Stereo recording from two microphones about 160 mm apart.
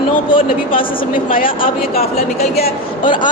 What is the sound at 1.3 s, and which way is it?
Speech, 60° left (ahead or behind).